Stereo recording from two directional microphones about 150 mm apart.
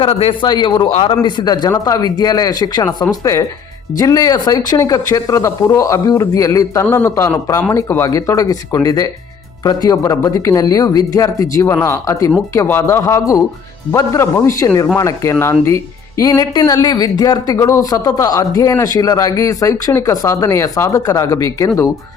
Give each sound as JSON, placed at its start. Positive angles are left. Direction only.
{"t": 0.0, "sound": "a man's voice", "side_deg": 40}